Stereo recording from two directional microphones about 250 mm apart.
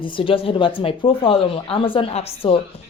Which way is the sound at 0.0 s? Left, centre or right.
Centre.